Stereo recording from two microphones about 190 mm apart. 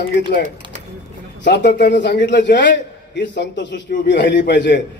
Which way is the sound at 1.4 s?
65° left (ahead or behind).